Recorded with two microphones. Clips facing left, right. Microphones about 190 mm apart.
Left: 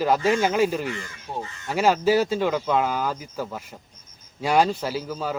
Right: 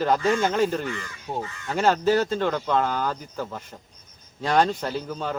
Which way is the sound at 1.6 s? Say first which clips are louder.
Left 1 dB; 10° left (ahead or behind).